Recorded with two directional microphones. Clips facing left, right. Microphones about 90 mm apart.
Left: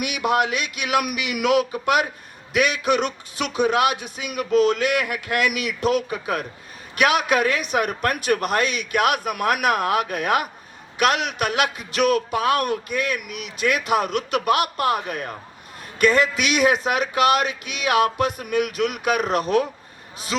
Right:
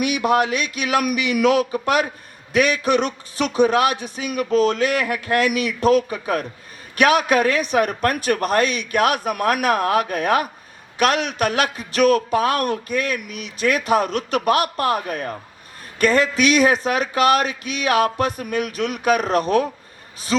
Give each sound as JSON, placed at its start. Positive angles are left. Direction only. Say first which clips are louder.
{"t": 0.0, "sound": "a man's voice", "louder": "right 3 dB", "side_deg": -35}